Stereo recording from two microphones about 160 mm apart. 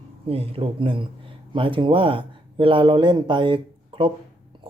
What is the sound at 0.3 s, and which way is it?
Speech, 35° right (ahead or behind).